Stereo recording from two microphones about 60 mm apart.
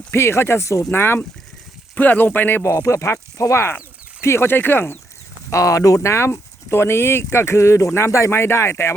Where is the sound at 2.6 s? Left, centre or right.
Left.